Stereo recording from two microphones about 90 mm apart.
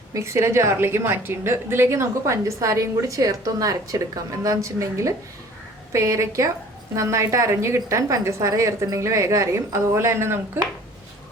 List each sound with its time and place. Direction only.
0.1 s a woman's voice: 30° right (ahead or behind)